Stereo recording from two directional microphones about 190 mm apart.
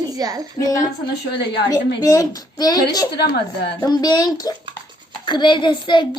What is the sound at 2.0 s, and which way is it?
A child's voice, 20° left (ahead or behind).